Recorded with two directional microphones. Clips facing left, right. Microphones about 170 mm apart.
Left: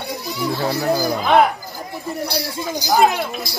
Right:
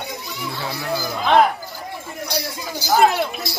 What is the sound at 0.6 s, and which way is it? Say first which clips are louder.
Speech: left 6 dB; 40° left (ahead or behind).